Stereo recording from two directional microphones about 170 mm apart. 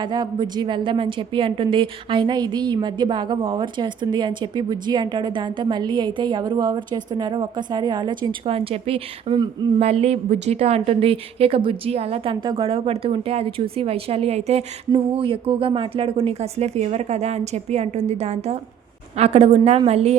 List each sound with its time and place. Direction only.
0.0 s a woman's voice: 25° right (ahead or behind)